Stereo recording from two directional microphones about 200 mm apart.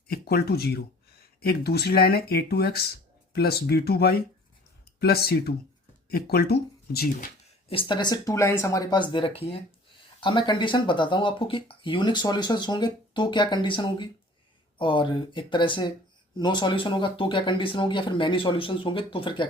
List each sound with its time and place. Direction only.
0.1 s speech: 50° left (ahead or behind)
7.7 s speech: 25° left (ahead or behind)